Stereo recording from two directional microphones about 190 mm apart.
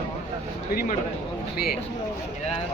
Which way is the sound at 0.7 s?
50° left (ahead or behind).